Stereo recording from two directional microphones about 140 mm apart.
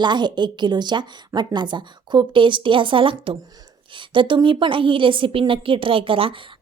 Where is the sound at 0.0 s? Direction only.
30° right (ahead or behind).